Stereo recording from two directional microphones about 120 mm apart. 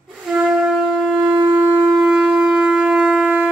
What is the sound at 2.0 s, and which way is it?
Shofar, 5° right (ahead or behind).